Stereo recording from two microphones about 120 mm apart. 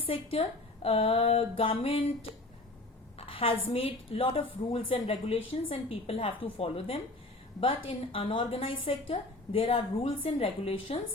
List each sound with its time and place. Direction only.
0.0 s a woman's voice: 50° left (ahead or behind)
3.2 s a woman's voice: 50° left (ahead or behind)